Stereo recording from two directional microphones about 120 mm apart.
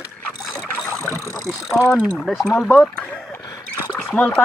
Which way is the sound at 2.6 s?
10° left (ahead or behind).